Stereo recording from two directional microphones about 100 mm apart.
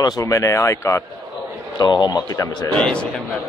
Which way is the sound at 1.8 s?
45° left (ahead or behind).